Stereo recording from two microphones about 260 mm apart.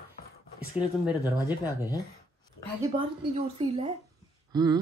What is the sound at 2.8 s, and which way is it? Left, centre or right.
Speech, centre.